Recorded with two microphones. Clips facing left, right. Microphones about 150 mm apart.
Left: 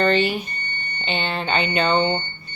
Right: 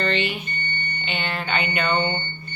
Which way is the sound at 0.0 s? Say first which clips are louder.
Left 5 dB; 40° left (ahead or behind).